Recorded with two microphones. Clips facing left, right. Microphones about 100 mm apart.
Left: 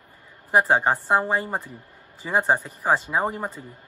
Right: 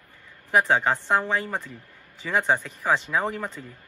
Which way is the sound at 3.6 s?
25° left (ahead or behind).